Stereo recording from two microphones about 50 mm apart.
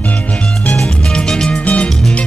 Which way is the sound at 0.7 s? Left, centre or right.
Centre.